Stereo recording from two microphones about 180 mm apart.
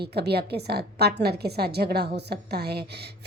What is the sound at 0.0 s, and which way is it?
A woman's voice, 65° right (ahead or behind).